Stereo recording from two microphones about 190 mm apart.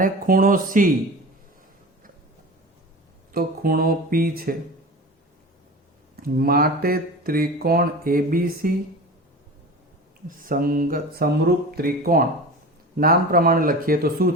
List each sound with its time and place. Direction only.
0.0 s speech: 45° right (ahead or behind)
3.3 s speech: 50° right (ahead or behind)
6.2 s speech: 50° right (ahead or behind)
10.2 s speech: 45° right (ahead or behind)